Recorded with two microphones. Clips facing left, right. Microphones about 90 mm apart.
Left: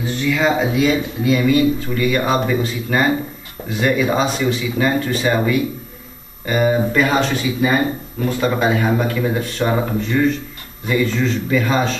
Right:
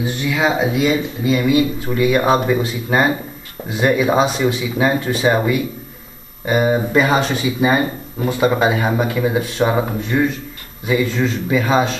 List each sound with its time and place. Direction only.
0.0 s speech: 10° right (ahead or behind)
1.9 s speech: 15° right (ahead or behind)